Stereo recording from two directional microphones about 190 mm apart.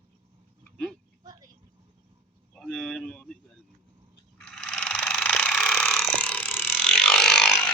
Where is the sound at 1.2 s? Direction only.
20° right (ahead or behind).